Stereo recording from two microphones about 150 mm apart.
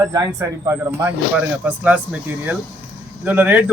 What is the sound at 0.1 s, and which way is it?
A man's voice, 20° right (ahead or behind).